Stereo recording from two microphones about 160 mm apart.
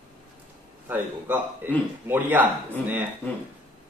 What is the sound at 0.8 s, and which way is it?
Speech, 10° right (ahead or behind).